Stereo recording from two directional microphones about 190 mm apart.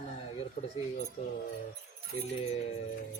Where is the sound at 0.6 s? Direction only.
40° left (ahead or behind).